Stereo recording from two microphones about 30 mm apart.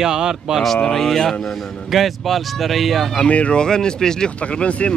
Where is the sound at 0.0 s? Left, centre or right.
Right.